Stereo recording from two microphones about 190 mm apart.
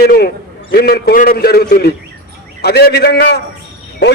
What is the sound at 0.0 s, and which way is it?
A man's voice, 55° left (ahead or behind).